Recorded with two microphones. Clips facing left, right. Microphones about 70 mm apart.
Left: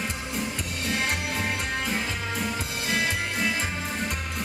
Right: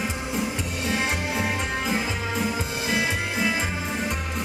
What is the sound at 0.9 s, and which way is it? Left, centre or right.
Music, centre.